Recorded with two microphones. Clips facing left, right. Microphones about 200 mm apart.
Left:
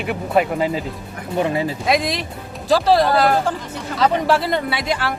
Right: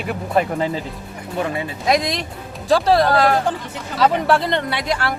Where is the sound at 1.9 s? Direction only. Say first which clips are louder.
Right 3 dB; centre (ahead or behind).